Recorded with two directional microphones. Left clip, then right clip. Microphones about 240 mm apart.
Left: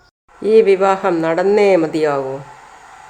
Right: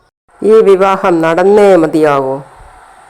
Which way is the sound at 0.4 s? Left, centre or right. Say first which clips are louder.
Right 5 dB; right.